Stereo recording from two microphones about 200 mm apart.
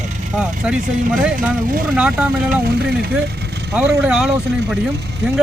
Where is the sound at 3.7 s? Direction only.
5° right (ahead or behind).